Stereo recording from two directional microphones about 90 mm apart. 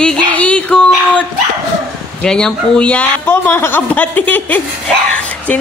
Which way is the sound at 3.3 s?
25° left (ahead or behind).